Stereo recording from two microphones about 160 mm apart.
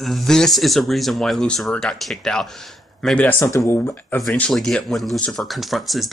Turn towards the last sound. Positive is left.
turn(degrees=0)  # may be behind; listen again after turning